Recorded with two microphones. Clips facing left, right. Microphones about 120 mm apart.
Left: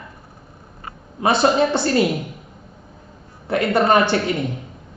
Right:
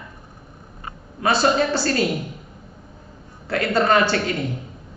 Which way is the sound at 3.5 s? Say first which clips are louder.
Left 2 dB; 20° left (ahead or behind).